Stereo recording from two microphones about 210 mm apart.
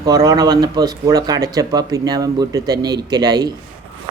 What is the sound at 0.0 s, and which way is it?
Speech, 20° right (ahead or behind).